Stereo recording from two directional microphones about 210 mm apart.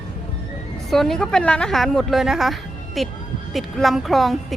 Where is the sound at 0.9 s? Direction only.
Centre (ahead or behind).